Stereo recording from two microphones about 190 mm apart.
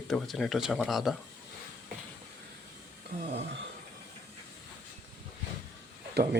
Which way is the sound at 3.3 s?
65° right (ahead or behind).